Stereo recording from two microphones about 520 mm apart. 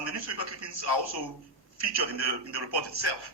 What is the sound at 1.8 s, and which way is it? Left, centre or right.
A man's voice, right.